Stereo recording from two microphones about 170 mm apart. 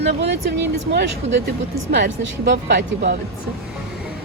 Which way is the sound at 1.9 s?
80° right.